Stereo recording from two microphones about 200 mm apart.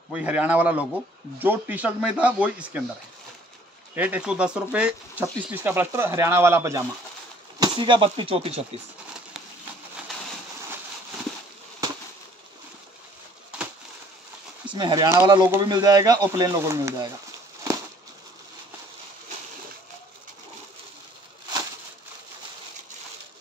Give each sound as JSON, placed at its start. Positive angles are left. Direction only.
{"t": 0.1, "sound": "speech", "side_deg": -5}
{"t": 3.9, "sound": "speech", "side_deg": -5}
{"t": 7.6, "sound": "speech", "side_deg": -25}
{"t": 14.7, "sound": "speech", "side_deg": -20}